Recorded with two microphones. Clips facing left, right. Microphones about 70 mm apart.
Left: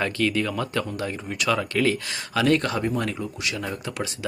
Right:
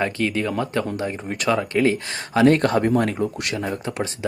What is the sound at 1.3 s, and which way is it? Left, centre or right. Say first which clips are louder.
Speech: right 2 dB; right.